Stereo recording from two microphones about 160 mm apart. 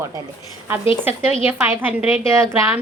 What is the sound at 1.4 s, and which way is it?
A woman's voice, 10° right (ahead or behind).